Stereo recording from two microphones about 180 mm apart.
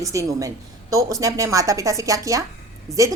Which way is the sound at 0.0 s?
15° right (ahead or behind).